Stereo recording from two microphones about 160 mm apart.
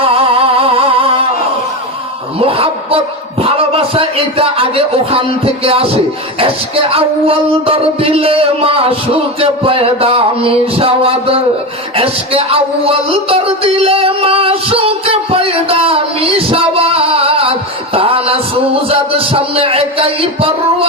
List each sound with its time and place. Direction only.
0.0 s humming: 35° right (ahead or behind)
2.4 s speech: 35° right (ahead or behind)
6.4 s music: 35° right (ahead or behind)
11.9 s speech: 35° right (ahead or behind)
17.9 s music: 35° right (ahead or behind)